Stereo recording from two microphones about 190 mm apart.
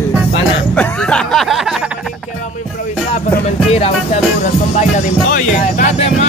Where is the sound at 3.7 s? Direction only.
30° left (ahead or behind).